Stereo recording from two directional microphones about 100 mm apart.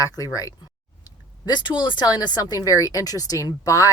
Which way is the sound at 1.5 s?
50° left (ahead or behind).